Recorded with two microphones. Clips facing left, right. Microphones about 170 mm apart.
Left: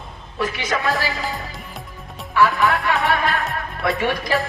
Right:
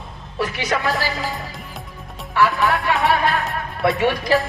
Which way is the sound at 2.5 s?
Centre (ahead or behind).